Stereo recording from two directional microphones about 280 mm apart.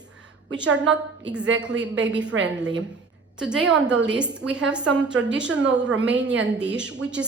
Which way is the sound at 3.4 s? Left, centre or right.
Centre.